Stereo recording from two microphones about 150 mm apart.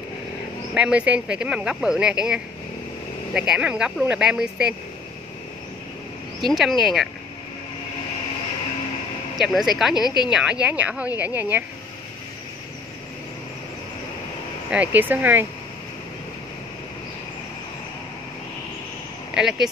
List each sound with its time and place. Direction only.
0.7 s speech: 10° right (ahead or behind)
6.4 s speech: centre (ahead or behind)
9.4 s speech: centre (ahead or behind)
10.0 s a woman's voice: 30° left (ahead or behind)
10.3 s speech: 5° right (ahead or behind)
14.7 s speech: 10° right (ahead or behind)
19.3 s speech: 5° right (ahead or behind)